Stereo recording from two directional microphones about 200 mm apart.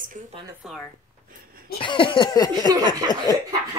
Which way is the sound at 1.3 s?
45° right (ahead or behind).